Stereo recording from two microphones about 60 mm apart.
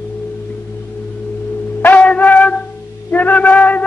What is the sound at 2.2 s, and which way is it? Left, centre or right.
Music, left.